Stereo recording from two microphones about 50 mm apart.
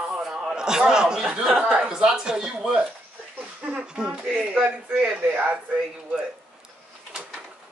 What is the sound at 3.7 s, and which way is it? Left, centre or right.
Speech, centre.